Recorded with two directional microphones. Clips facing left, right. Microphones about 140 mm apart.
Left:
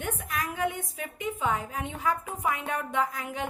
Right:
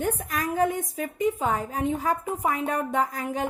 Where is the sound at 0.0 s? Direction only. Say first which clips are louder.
Right 5 dB; 40° right (ahead or behind).